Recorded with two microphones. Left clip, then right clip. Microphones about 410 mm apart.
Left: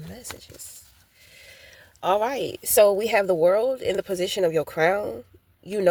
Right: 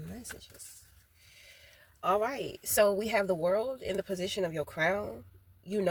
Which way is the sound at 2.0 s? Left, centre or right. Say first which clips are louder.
Left 7 dB; left.